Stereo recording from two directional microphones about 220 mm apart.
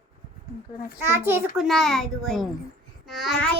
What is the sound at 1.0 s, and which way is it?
Child singing, 10° right (ahead or behind).